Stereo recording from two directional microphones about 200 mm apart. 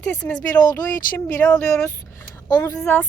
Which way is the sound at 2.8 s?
10° left (ahead or behind).